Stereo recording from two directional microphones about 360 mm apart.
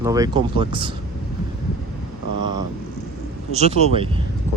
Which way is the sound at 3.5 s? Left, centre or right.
Centre.